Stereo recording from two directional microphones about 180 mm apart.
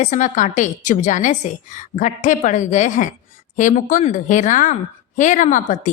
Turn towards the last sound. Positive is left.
turn(degrees=45)  # may be behind; listen again after turning